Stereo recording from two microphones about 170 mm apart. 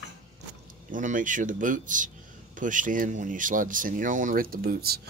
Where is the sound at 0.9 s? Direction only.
50° right (ahead or behind).